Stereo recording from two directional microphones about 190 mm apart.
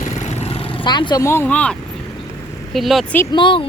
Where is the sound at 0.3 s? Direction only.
35° left (ahead or behind); by 3.2 s centre (ahead or behind).